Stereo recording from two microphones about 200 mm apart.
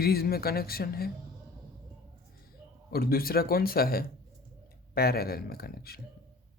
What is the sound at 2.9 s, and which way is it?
Speech, 50° left (ahead or behind).